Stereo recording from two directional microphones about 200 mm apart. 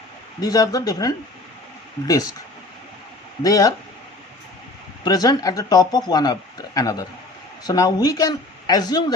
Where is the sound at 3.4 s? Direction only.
15° left (ahead or behind).